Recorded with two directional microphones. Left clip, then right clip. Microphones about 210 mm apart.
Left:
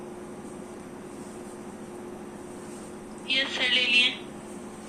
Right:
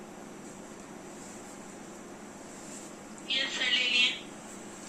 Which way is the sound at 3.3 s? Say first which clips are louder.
Left 4 dB; 55° left (ahead or behind).